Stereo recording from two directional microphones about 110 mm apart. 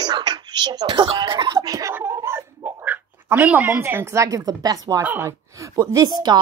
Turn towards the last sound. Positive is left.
turn(degrees=-40)  # may be behind; listen again after turning